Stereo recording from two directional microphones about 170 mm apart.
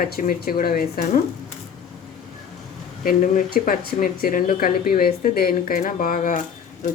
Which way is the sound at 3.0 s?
50° left (ahead or behind).